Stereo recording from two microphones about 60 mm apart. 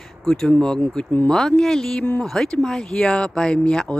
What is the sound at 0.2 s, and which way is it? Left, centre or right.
Speech, centre.